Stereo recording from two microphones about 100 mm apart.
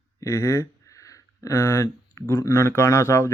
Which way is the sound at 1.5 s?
20° left (ahead or behind).